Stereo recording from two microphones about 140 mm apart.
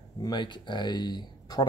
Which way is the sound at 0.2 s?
30° left (ahead or behind).